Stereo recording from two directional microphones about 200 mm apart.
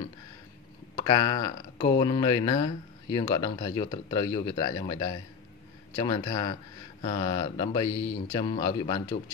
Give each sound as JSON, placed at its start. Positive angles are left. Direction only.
{"t": 0.9, "sound": "speech", "side_deg": 20}